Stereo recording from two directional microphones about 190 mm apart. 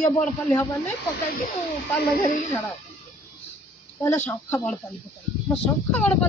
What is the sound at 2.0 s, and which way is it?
Speech, 50° left (ahead or behind).